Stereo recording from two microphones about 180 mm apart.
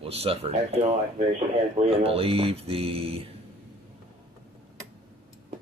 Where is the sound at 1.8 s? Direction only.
35° right (ahead or behind).